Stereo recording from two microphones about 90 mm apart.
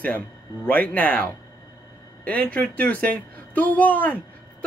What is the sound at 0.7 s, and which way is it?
A woman's voice, 15° left (ahead or behind).